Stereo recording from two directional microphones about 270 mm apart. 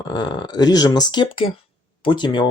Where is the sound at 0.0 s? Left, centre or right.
Centre.